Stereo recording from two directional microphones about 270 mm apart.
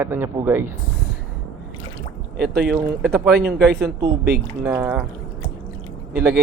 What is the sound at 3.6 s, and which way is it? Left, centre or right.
Speech, right.